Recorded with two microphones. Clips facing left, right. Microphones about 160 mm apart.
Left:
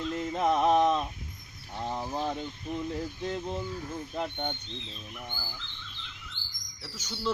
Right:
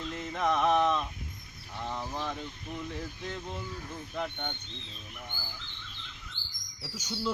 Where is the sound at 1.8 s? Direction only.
30° left (ahead or behind).